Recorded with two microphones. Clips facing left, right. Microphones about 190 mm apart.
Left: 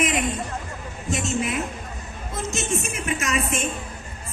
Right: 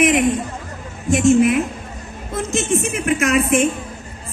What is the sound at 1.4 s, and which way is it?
A woman's voice, 60° right (ahead or behind).